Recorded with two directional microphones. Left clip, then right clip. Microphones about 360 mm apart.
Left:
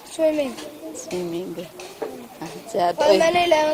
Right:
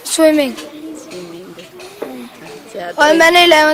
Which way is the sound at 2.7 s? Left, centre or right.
Left.